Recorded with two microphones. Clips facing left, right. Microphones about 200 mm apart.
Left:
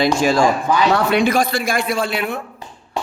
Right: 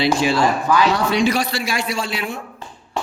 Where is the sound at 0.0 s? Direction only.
45° left (ahead or behind).